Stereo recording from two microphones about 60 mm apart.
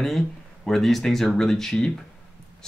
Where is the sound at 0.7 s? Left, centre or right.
Centre.